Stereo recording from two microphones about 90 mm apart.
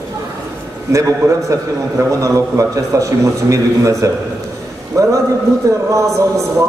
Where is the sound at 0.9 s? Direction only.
35° right (ahead or behind).